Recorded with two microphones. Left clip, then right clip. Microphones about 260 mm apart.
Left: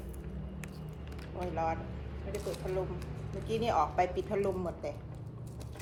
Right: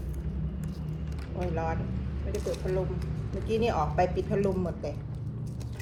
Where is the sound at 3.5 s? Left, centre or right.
Centre.